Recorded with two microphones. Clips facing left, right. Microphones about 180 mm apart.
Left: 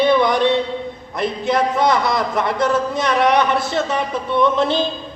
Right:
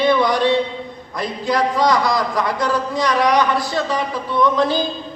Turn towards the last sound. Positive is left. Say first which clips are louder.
# even
turn(degrees=25)  # may be behind; listen again after turning